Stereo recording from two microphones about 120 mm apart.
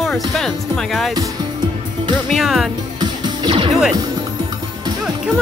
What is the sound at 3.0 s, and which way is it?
Music, 45° right (ahead or behind).